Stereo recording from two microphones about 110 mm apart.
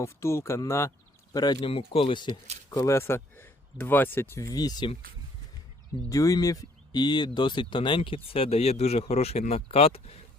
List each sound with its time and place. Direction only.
0.0 s speech: 25° left (ahead or behind)
1.6 s speech: 60° left (ahead or behind)
2.6 s speech: 30° left (ahead or behind)
6.1 s speech: 30° left (ahead or behind); by 10.2 s 65° left (ahead or behind)